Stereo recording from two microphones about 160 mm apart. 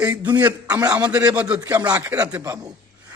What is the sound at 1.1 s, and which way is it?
A man's voice, 10° right (ahead or behind).